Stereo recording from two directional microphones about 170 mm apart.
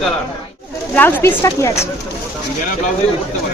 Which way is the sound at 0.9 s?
10° left (ahead or behind).